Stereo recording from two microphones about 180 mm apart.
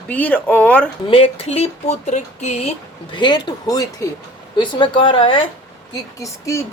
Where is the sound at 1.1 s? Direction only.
30° left (ahead or behind).